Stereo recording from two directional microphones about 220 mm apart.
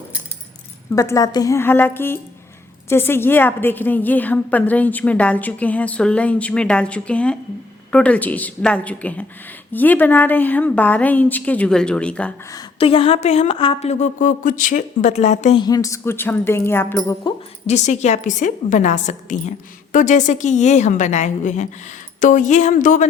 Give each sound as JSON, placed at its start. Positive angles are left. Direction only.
{"t": 0.9, "sound": "a woman's voice", "side_deg": 15}
{"t": 12.5, "sound": "a woman's voice", "side_deg": 25}
{"t": 15.6, "sound": "a woman's voice", "side_deg": 15}
{"t": 17.7, "sound": "a woman's voice", "side_deg": 30}